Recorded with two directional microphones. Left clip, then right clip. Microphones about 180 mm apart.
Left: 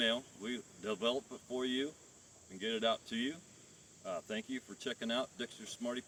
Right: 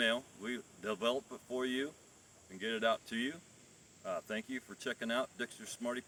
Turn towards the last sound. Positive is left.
turn(degrees=-10)  # may be behind; listen again after turning